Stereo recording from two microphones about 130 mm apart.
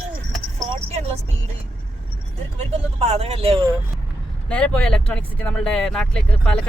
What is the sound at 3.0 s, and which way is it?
Speech, 50° right (ahead or behind).